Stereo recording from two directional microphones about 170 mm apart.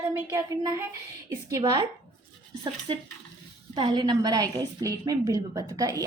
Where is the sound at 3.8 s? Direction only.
25° right (ahead or behind).